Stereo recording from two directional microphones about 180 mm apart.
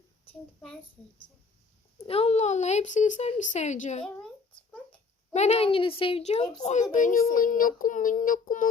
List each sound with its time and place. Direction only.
2.0 s a woman's voice: 35° left (ahead or behind)
5.3 s a woman's voice: 40° left (ahead or behind)
6.9 s child singing: 50° left (ahead or behind)